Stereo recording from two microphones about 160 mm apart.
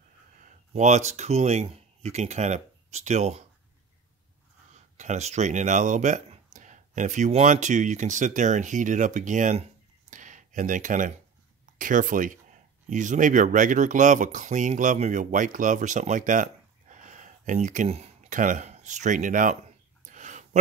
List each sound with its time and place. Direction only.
0.4 s speech: 50° right (ahead or behind)
4.9 s speech: 45° right (ahead or behind)
20.1 s a sound: 50° right (ahead or behind)